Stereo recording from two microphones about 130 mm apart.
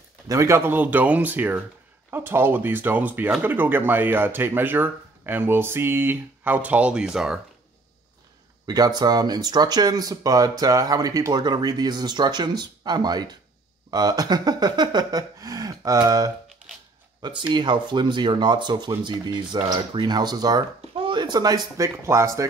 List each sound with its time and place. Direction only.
0.3 s speech: 20° right (ahead or behind); by 7.3 s 5° right (ahead or behind)
8.6 s speech: 30° right (ahead or behind)